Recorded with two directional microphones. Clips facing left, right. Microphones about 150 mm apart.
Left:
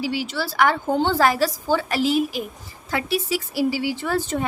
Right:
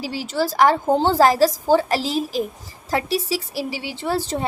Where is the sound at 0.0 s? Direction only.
35° right (ahead or behind).